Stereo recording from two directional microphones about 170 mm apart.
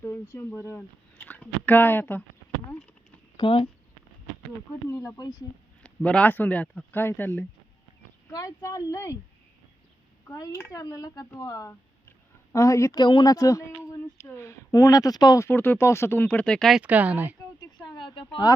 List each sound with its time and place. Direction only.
0.0 s speech: 15° left (ahead or behind)
3.3 s speech: 30° left (ahead or behind)
4.9 s speech: 15° left (ahead or behind)
5.8 s a woman's voice: 5° left (ahead or behind)
10.2 s a woman's voice: 20° left (ahead or behind); by 17.3 s 10° right (ahead or behind)
17.8 s speech: 30° left (ahead or behind)